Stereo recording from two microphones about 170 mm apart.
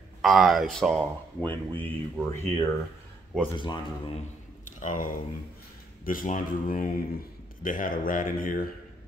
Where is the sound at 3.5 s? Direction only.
30° left (ahead or behind).